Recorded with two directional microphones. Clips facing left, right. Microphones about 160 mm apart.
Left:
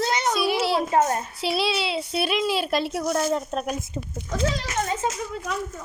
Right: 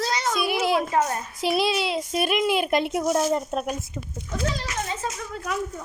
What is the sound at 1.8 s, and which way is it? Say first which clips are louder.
Speech: right 1 dB; 45° right (ahead or behind).